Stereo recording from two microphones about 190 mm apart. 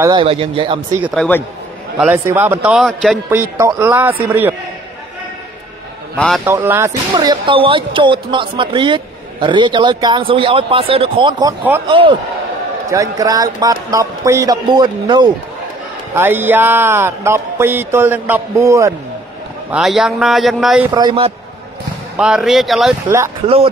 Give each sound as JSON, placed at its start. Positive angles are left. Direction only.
{"t": 0.1, "sound": "speech", "side_deg": -30}
{"t": 1.1, "sound": "a man's voice", "side_deg": 5}
{"t": 2.0, "sound": "speech", "side_deg": -10}
{"t": 3.3, "sound": "speech", "side_deg": -15}
{"t": 6.1, "sound": "a man's voice", "side_deg": 0}
{"t": 6.4, "sound": "speech", "side_deg": -10}
{"t": 7.2, "sound": "speech", "side_deg": -25}
{"t": 16.2, "sound": "speech", "side_deg": -10}
{"t": 19.7, "sound": "a man's voice", "side_deg": 0}
{"t": 20.9, "sound": "speech", "side_deg": -25}
{"t": 22.1, "sound": "a man's voice", "side_deg": -5}
{"t": 23.0, "sound": "speech", "side_deg": -15}
{"t": 23.4, "sound": "speech", "side_deg": -30}